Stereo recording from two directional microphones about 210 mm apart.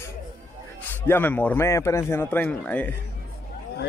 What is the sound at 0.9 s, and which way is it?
Speech, 10° left (ahead or behind).